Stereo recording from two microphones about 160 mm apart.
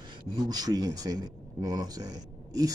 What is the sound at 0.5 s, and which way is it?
Speech, 25° right (ahead or behind).